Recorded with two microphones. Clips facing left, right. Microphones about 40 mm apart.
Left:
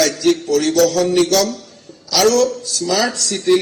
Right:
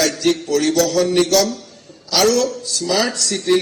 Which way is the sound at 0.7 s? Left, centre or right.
Left.